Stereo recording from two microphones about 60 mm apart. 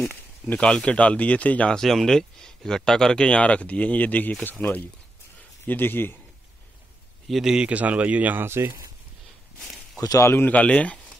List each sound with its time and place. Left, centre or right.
0.6 s speech: centre
1.8 s a man's voice: centre; by 6.1 s left
7.2 s a man's voice: centre
7.5 s a man's voice: right
8.5 s speech: right
9.9 s a man's voice: left
10.4 s speech: left